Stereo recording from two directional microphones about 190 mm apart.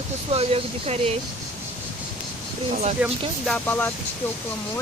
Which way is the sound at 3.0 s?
5° right (ahead or behind).